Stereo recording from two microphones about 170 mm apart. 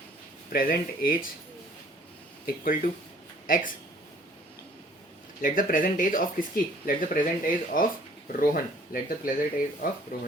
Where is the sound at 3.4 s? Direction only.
55° left (ahead or behind).